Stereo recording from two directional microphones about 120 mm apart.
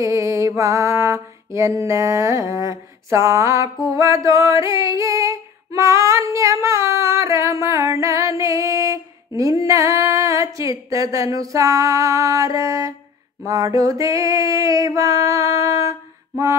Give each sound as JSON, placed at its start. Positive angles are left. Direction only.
{"t": 0.0, "sound": "music", "side_deg": -25}
{"t": 3.9, "sound": "singing", "side_deg": -25}
{"t": 9.4, "sound": "music", "side_deg": -30}
{"t": 13.5, "sound": "a sound", "side_deg": -30}